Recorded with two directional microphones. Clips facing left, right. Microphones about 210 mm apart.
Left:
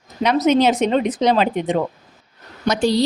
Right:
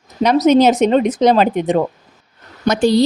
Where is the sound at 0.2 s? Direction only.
40° right (ahead or behind).